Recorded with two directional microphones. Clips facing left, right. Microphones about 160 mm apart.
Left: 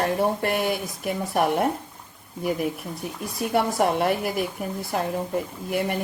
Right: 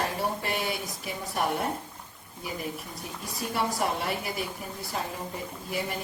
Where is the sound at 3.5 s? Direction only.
60° left (ahead or behind).